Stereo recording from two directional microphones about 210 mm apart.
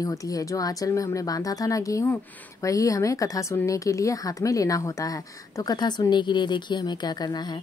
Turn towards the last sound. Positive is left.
turn(degrees=20)  # may be behind; listen again after turning